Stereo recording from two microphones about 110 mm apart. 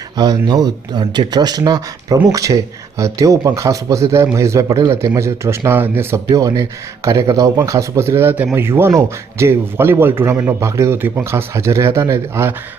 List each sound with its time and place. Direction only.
0.2 s speech: 40° right (ahead or behind); by 6.1 s 20° right (ahead or behind)
6.3 s speech: 35° right (ahead or behind)